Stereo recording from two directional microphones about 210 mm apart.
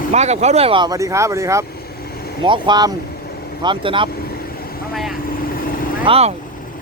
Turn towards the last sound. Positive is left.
turn(degrees=-30)  # may be behind; listen again after turning